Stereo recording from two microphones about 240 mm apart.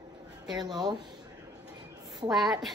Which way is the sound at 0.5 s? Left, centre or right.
Centre.